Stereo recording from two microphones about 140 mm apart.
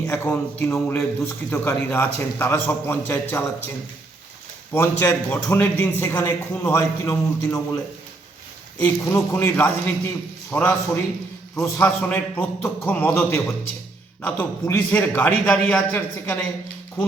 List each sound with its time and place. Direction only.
0.1 s a man's voice: 15° left (ahead or behind)
4.7 s a man's voice: 15° left (ahead or behind)
9.0 s a man's voice: 15° left (ahead or behind)